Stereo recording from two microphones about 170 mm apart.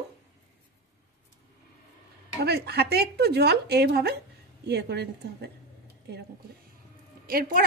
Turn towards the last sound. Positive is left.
turn(degrees=-60)  # may be behind; listen again after turning